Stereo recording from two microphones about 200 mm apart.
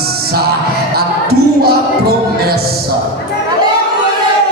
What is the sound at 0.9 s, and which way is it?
Music, 50° right (ahead or behind).